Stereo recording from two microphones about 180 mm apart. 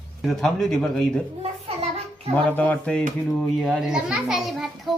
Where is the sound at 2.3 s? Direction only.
10° left (ahead or behind).